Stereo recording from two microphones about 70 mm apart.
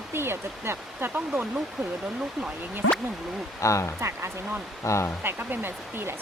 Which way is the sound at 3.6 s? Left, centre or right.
Left.